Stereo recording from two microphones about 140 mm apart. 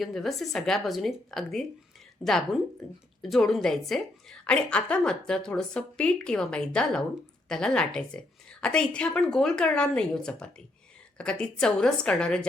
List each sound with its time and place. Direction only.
0.0 s a woman's voice: centre (ahead or behind)